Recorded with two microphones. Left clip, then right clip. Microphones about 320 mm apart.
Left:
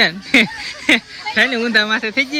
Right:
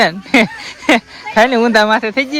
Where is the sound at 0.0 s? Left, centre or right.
Centre.